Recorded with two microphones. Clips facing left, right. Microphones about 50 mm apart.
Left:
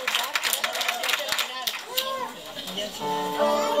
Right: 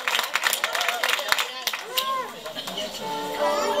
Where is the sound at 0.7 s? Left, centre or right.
Right.